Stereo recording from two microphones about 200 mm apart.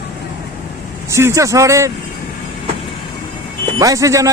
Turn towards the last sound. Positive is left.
turn(degrees=-15)  # may be behind; listen again after turning